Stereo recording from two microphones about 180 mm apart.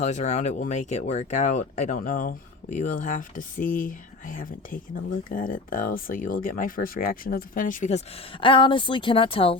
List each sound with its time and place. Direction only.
0.0 s speech: 40° left (ahead or behind)